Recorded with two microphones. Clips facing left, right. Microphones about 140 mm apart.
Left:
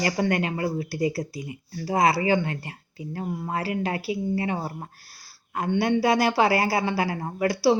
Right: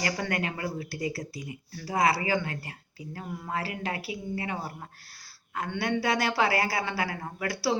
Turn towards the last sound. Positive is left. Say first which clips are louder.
# left 8 dB
turn(degrees=30)  # may be behind; listen again after turning